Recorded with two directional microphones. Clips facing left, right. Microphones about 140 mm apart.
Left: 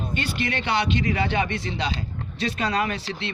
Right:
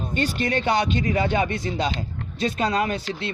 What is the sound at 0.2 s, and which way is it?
A man's voice, 40° right (ahead or behind).